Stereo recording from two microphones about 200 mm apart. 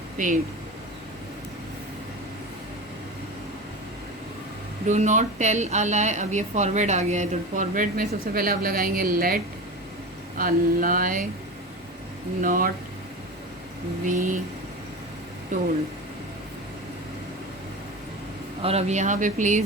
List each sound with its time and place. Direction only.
0.2 s a woman's voice: 40° right (ahead or behind)
4.9 s a woman's voice: 35° right (ahead or behind)
12.4 s speech: 45° right (ahead or behind)
14.0 s a woman's voice: 40° right (ahead or behind)
15.5 s a woman's voice: 40° right (ahead or behind)
18.6 s a woman's voice: 30° right (ahead or behind)